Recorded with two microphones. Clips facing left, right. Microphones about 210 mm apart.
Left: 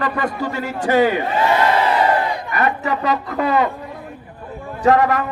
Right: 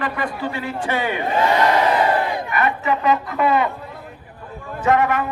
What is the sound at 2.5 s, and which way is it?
Speech, 40° left (ahead or behind).